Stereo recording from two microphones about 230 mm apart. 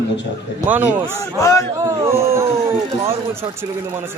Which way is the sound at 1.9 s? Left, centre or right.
Centre.